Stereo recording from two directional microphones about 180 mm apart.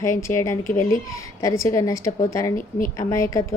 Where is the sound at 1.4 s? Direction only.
15° left (ahead or behind).